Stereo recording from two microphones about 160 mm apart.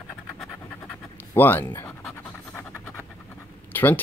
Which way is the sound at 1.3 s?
15° left (ahead or behind).